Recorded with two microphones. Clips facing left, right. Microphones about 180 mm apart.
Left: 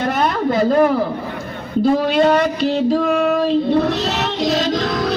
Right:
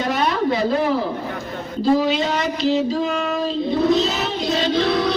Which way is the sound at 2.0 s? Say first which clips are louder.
Left 6 dB; 55° left (ahead or behind).